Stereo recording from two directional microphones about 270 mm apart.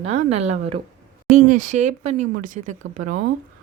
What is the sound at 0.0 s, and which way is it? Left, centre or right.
Speech, right.